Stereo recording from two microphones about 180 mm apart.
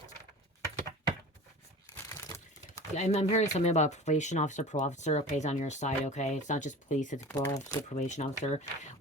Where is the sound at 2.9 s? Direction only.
40° left (ahead or behind).